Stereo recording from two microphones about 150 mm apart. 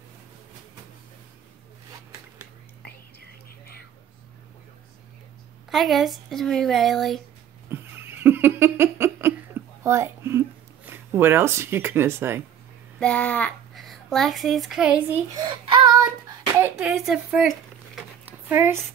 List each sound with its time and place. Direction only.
5.7 s speech: centre (ahead or behind)
7.7 s giggle: 15° right (ahead or behind)
10.9 s speech: 15° right (ahead or behind)
13.0 s a child's voice: 10° left (ahead or behind); by 15.1 s 10° right (ahead or behind)
15.3 s child singing: 30° right (ahead or behind)
16.8 s a sound: centre (ahead or behind)
18.6 s speech: 20° right (ahead or behind)